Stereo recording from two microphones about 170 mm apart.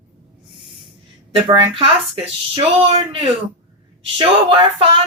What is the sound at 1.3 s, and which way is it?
A woman's voice, 30° right (ahead or behind).